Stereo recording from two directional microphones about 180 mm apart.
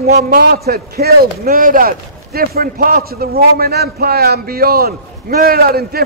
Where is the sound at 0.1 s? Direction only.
55° right (ahead or behind).